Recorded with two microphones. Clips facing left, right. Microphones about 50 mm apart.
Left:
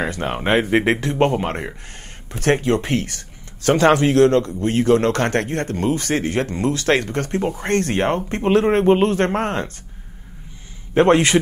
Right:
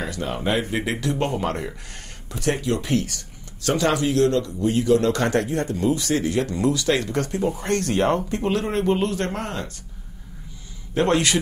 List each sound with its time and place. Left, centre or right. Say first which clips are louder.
0.0 s a man's voice: left 4 dB; left
2.3 s a man's voice: left 5 dB; left
11.0 s a man's voice: left 6 dB; left